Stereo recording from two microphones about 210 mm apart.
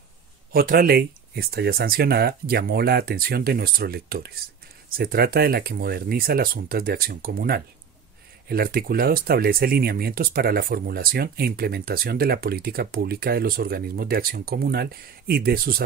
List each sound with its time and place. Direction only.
0.5 s speech: 45° right (ahead or behind)